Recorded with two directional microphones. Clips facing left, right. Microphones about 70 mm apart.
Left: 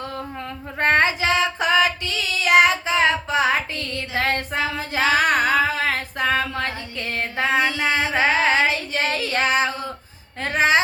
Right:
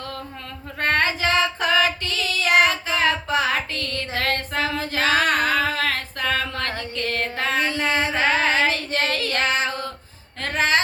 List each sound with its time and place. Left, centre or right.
0.8 s female singing: left
2.5 s child singing: centre
10.4 s a sound: centre